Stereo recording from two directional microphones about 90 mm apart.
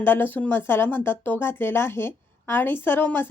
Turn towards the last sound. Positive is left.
turn(degrees=25)  # may be behind; listen again after turning